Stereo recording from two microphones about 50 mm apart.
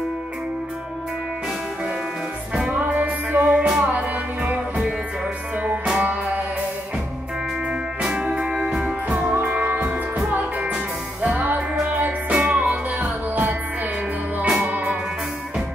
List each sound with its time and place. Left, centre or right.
2.5 s music: centre
2.8 s music: right
3.5 s music: centre
5.9 s music: right
8.0 s music: right
9.3 s music: right
11.2 s music: right
12.4 s music: centre
13.3 s music: right
14.6 s music: right